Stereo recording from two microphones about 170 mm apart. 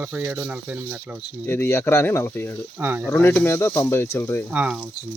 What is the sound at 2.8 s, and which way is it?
Speech, 10° right (ahead or behind).